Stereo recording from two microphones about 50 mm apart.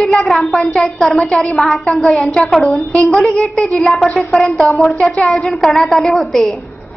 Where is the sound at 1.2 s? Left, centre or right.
Centre.